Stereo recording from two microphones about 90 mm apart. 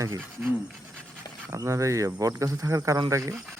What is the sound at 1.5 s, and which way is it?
Speech, 35° right (ahead or behind).